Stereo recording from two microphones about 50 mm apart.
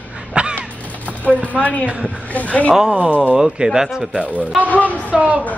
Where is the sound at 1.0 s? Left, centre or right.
Left.